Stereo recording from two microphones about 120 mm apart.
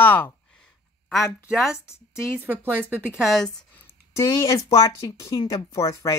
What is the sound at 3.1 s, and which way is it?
Speech, centre (ahead or behind).